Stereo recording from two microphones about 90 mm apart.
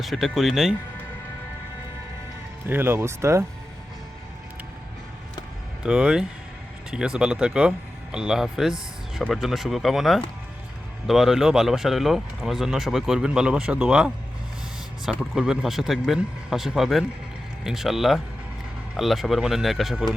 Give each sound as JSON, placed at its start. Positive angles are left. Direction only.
{"t": 0.0, "sound": "speech", "side_deg": 0}
{"t": 2.6, "sound": "speech", "side_deg": -25}
{"t": 5.8, "sound": "speech", "side_deg": -10}